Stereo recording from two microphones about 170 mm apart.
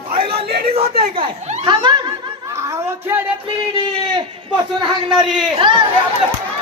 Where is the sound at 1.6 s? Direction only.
25° right (ahead or behind).